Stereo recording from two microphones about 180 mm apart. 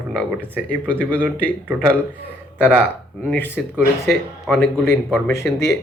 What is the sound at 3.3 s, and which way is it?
Speech, 10° left (ahead or behind).